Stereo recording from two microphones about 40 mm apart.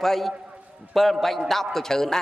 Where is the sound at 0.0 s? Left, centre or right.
Centre.